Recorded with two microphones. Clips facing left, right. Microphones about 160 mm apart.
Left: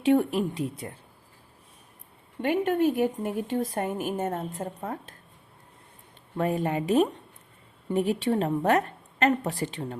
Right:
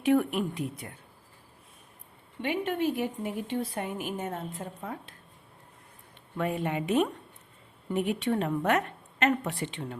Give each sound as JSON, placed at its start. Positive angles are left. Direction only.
{"t": 0.0, "sound": "a woman's voice", "side_deg": 30}
{"t": 2.4, "sound": "a woman's voice", "side_deg": 45}
{"t": 6.3, "sound": "a woman's voice", "side_deg": 40}